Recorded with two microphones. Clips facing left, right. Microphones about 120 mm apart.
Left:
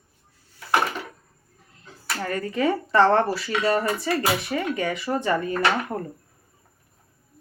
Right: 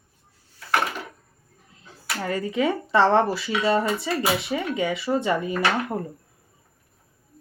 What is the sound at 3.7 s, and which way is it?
Speech, 20° right (ahead or behind).